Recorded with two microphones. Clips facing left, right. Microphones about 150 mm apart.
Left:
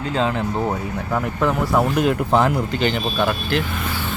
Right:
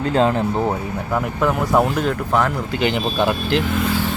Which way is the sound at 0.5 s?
20° right (ahead or behind).